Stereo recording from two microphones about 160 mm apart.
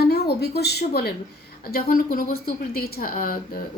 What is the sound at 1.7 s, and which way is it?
Speech, 60° left (ahead or behind).